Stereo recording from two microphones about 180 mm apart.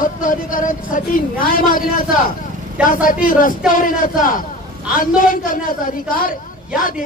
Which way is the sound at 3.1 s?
50° left (ahead or behind).